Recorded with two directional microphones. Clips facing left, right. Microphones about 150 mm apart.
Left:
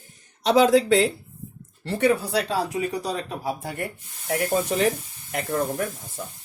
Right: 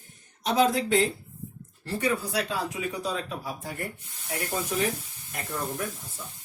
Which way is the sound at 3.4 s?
70° left (ahead or behind).